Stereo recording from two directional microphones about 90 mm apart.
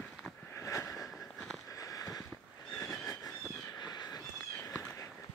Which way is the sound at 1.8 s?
40° left (ahead or behind).